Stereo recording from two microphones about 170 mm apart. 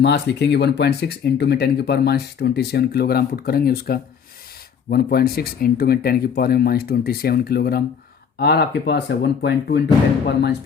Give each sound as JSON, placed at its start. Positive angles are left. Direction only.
{"t": 0.0, "sound": "speech", "side_deg": 85}